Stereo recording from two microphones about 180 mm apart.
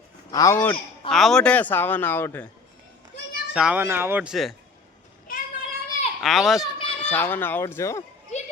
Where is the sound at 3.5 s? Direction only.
5° right (ahead or behind).